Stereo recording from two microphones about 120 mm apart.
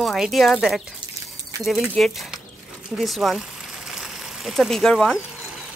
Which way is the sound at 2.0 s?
Centre (ahead or behind).